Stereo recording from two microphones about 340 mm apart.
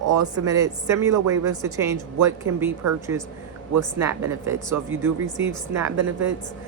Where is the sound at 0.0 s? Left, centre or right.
Right.